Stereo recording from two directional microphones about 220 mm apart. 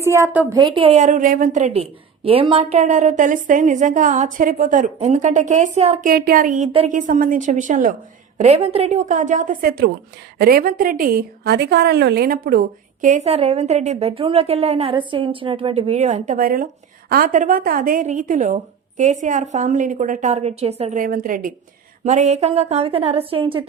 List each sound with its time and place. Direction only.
0.0 s a woman's voice: 10° right (ahead or behind)